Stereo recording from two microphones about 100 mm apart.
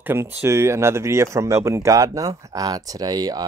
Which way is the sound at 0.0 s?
20° right (ahead or behind).